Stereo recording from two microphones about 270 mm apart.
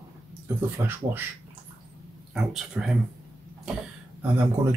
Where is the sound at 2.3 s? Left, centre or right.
Centre.